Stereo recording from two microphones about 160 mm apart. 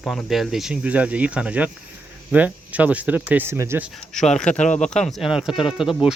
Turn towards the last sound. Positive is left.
turn(degrees=0)  # may be behind; listen again after turning